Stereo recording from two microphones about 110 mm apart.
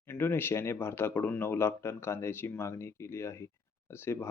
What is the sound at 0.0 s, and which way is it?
Speech, 20° left (ahead or behind).